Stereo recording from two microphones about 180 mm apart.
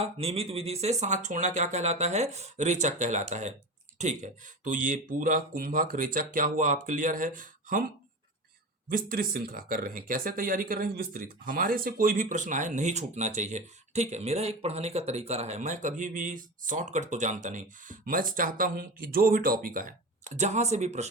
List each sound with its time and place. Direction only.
0.0 s speech: 35° right (ahead or behind); by 7.9 s 50° right (ahead or behind)
8.9 s speech: 50° right (ahead or behind)